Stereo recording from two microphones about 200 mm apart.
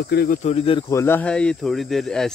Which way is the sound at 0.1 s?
50° left (ahead or behind).